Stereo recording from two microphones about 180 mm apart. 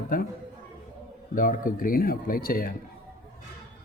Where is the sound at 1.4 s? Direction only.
50° left (ahead or behind).